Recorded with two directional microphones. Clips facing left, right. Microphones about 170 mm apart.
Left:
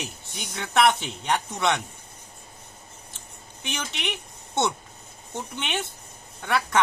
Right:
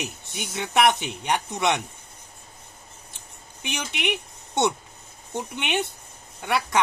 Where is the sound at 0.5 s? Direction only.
10° right (ahead or behind).